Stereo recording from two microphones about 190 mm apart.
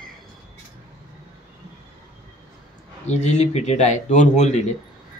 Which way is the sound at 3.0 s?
35° left (ahead or behind).